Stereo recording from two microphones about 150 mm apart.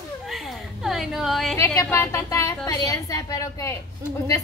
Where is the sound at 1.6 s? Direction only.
20° left (ahead or behind).